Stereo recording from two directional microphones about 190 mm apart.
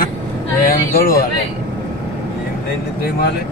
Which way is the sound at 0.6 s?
50° left (ahead or behind).